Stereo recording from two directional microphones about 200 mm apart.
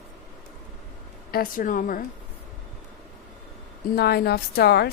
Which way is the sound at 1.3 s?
45° left (ahead or behind).